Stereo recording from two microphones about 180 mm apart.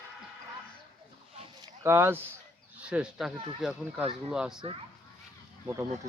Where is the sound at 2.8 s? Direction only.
5° right (ahead or behind).